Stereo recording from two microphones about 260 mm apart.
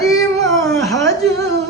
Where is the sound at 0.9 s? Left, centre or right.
Centre.